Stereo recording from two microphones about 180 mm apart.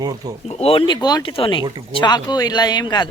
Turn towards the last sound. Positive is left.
turn(degrees=25)  # may be behind; listen again after turning